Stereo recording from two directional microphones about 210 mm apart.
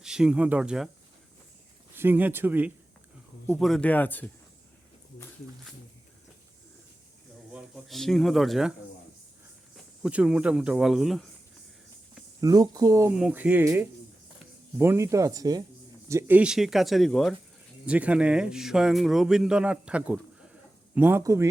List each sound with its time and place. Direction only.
0.0 s speech: 5° right (ahead or behind)
2.0 s speech: 10° right (ahead or behind); by 4.3 s 10° left (ahead or behind)
7.5 s speech: centre (ahead or behind)
9.7 s speech: 5° right (ahead or behind)
12.4 s speech: 20° right (ahead or behind)